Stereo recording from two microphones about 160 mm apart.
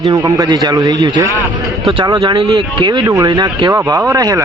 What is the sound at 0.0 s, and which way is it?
Speech, 20° right (ahead or behind).